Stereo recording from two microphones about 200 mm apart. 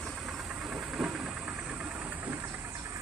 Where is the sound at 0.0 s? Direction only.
Centre (ahead or behind).